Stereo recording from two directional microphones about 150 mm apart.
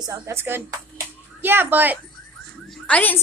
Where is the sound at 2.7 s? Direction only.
10° left (ahead or behind).